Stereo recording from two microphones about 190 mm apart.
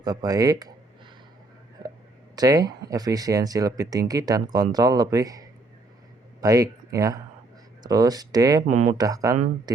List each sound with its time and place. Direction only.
0.0 s speech: 20° right (ahead or behind)
2.3 s speech: 20° right (ahead or behind)
8.6 s speech: 40° right (ahead or behind)
8.9 s speech: 20° right (ahead or behind)